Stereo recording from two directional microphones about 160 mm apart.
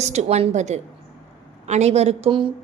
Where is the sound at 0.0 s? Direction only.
45° right (ahead or behind).